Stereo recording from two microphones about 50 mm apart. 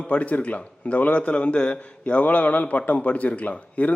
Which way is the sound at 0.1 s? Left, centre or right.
Left.